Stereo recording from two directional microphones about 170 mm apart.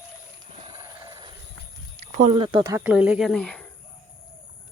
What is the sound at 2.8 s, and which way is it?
Speech, 5° right (ahead or behind).